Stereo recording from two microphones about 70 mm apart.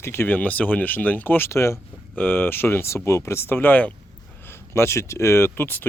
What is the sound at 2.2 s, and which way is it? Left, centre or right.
Speech, left.